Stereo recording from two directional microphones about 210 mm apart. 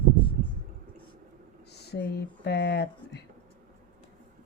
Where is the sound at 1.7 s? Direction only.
50° left (ahead or behind).